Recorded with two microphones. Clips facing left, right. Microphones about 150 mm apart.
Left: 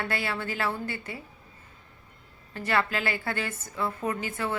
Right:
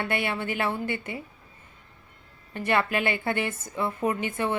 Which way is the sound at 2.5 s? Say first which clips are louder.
Right 3 dB; 20° right (ahead or behind).